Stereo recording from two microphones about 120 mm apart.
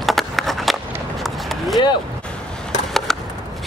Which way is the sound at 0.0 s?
Centre (ahead or behind).